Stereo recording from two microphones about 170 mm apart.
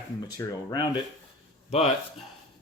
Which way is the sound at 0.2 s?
25° left (ahead or behind).